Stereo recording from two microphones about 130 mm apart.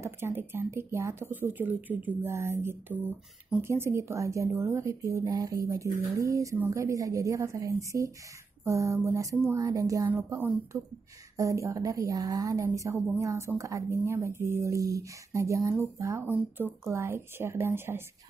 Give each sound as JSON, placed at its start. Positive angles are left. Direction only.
{"t": 0.0, "sound": "speech", "side_deg": -20}